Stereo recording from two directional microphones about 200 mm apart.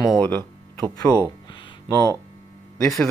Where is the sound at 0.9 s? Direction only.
15° left (ahead or behind).